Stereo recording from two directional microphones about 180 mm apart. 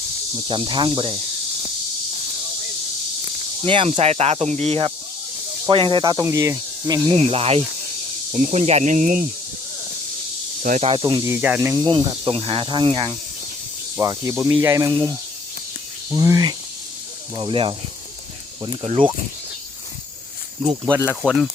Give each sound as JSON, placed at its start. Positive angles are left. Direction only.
{"t": 0.4, "sound": "speech", "side_deg": -30}
{"t": 3.6, "sound": "speech", "side_deg": -30}
{"t": 5.6, "sound": "speech", "side_deg": -30}
{"t": 7.1, "sound": "speech", "side_deg": -35}
{"t": 10.6, "sound": "speech", "side_deg": -50}
{"t": 10.8, "sound": "speech", "side_deg": -25}
{"t": 11.9, "sound": "speech", "side_deg": -30}
{"t": 13.9, "sound": "speech", "side_deg": -20}
{"t": 16.1, "sound": "speech", "side_deg": -20}
{"t": 20.9, "sound": "speech", "side_deg": -10}
{"t": 21.2, "sound": "speech", "side_deg": 0}